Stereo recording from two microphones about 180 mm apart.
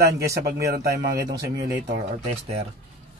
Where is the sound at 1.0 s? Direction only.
25° right (ahead or behind).